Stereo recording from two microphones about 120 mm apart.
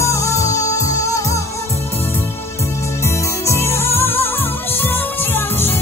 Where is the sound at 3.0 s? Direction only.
20° left (ahead or behind).